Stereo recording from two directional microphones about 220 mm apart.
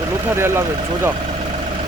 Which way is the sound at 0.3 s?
10° right (ahead or behind).